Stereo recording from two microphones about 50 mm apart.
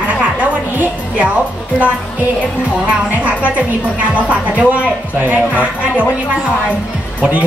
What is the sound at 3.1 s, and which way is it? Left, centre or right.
Speech, right.